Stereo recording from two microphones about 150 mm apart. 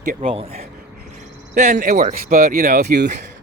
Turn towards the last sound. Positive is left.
turn(degrees=-85)